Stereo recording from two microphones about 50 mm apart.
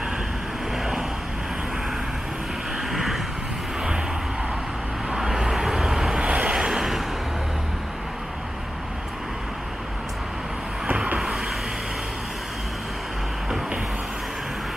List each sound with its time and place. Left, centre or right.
2.9 s vehicle: centre
5.1 s vehicle: centre
6.1 s vehicle: right